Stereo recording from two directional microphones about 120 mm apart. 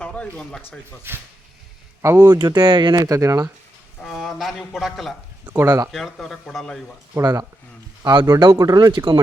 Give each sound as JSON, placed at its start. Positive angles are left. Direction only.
{"t": 0.0, "sound": "speech", "side_deg": 10}
{"t": 1.1, "sound": "speech", "side_deg": -20}
{"t": 2.4, "sound": "speech", "side_deg": -40}
{"t": 4.0, "sound": "speech", "side_deg": 0}
{"t": 5.5, "sound": "speech", "side_deg": -25}
{"t": 5.9, "sound": "speech", "side_deg": 0}
{"t": 7.1, "sound": "speech", "side_deg": -25}